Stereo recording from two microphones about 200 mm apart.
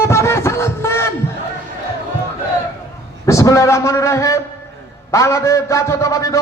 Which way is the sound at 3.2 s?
15° left (ahead or behind).